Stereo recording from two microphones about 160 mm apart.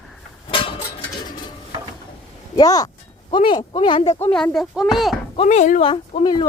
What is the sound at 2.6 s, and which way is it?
Speech, 20° left (ahead or behind).